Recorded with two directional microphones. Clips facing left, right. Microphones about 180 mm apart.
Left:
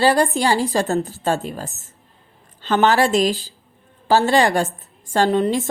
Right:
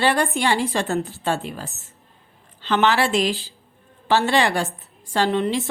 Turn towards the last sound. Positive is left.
turn(degrees=40)  # may be behind; listen again after turning